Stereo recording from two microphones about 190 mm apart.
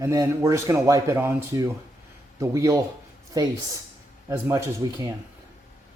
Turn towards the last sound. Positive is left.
turn(degrees=-15)  # may be behind; listen again after turning